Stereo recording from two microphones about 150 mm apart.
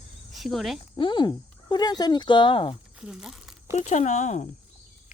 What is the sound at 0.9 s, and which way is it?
Speech, 30° left (ahead or behind).